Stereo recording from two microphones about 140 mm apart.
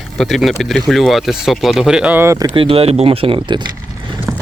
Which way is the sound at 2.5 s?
40° right (ahead or behind).